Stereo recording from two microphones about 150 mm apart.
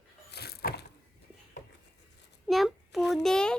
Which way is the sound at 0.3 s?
90° left.